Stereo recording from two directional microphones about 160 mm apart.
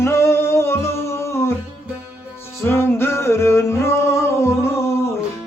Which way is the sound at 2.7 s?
15° left (ahead or behind).